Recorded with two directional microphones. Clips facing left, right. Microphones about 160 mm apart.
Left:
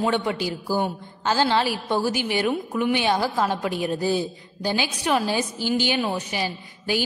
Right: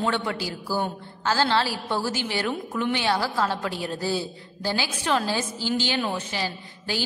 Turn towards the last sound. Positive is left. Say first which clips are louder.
# left 5 dB
turn(degrees=15)  # may be behind; listen again after turning